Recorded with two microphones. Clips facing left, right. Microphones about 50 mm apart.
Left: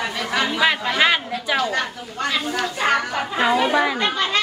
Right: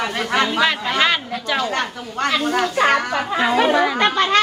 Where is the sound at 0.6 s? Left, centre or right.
Centre.